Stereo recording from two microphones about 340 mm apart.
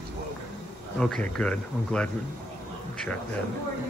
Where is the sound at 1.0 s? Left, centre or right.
Centre.